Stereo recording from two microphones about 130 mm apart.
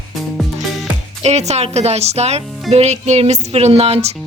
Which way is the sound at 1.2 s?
60° right (ahead or behind).